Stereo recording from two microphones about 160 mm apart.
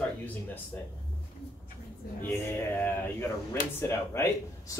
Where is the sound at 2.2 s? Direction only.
10° left (ahead or behind).